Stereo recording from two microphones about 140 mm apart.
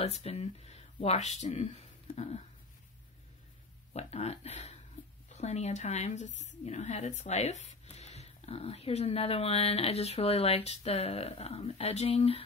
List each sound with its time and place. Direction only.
0.0 s speech: 50° left (ahead or behind)
3.9 s speech: 50° left (ahead or behind)